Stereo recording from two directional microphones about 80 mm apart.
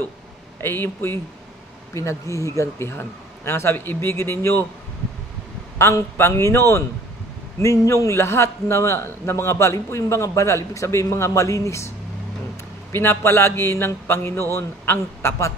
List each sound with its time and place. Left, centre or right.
0.6 s a man's voice: left
5.8 s a man's voice: left
12.9 s a man's voice: left